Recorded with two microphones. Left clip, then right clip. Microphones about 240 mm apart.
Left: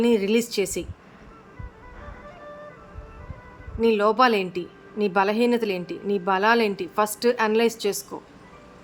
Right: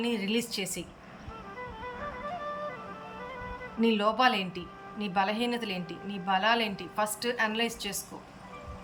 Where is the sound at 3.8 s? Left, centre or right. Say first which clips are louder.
Left 7 dB; centre.